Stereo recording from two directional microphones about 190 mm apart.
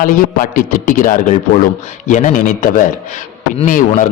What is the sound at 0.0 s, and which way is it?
A man's voice, 45° left (ahead or behind).